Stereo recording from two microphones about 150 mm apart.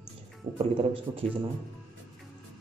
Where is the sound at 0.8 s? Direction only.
40° right (ahead or behind).